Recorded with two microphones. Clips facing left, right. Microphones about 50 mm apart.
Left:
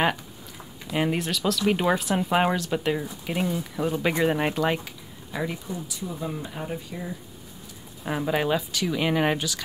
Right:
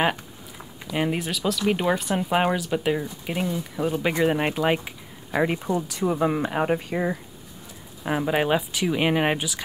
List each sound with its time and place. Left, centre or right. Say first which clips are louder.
0.9 s speech: even; centre
5.3 s speech: right 8 dB; right
8.0 s speech: right 2 dB; right